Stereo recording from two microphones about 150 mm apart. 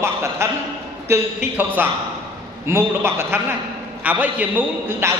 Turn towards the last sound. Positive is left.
turn(degrees=-15)  # may be behind; listen again after turning